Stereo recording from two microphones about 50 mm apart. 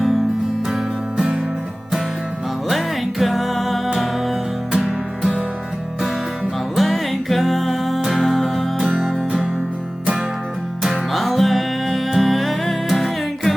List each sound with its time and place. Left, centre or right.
0.7 s music: centre
2.6 s music: centre
4.7 s music: centre
6.7 s music: centre
11.1 s music: centre